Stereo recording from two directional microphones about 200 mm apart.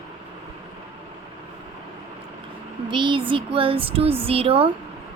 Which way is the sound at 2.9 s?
25° right (ahead or behind).